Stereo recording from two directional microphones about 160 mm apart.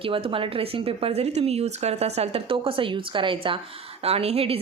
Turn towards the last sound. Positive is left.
turn(degrees=-40)  # may be behind; listen again after turning